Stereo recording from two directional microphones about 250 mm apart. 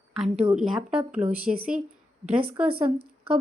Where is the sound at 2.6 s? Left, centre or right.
Centre.